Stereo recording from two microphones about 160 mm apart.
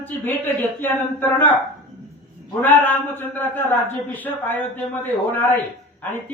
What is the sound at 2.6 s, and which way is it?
A man's voice, 10° left (ahead or behind).